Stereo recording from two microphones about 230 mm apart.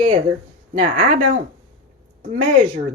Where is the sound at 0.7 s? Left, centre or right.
Right.